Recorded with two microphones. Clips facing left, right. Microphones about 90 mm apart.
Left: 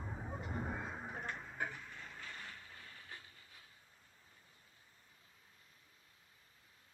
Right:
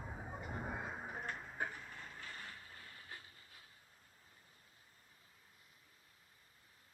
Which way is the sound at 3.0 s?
25° right (ahead or behind).